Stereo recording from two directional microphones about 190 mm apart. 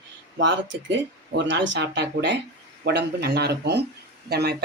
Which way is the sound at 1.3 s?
70° right (ahead or behind).